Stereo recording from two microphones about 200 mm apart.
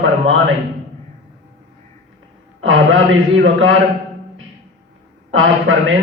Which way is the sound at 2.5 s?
80° right.